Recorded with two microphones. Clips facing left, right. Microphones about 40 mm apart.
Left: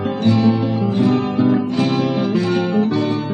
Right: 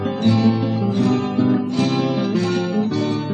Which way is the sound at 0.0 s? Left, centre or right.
Centre.